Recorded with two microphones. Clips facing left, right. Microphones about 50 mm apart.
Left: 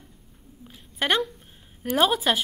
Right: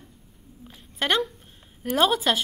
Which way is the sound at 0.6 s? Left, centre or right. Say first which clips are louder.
Even; centre.